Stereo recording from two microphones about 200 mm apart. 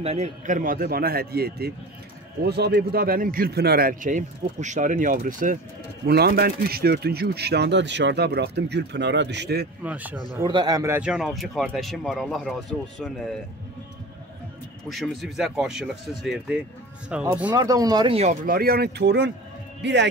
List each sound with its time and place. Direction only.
0.0 s a man's voice: 35° right (ahead or behind)
6.0 s speech: 55° right (ahead or behind)
9.8 s speech: 10° right (ahead or behind)
10.4 s speech: 20° right (ahead or behind); by 13.4 s centre (ahead or behind)
14.9 s speech: centre (ahead or behind); by 20.1 s 60° right (ahead or behind)